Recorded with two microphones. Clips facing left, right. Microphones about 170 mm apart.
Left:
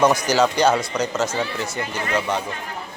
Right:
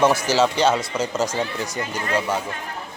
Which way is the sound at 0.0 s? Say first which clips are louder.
Left 1 dB; 5° right (ahead or behind).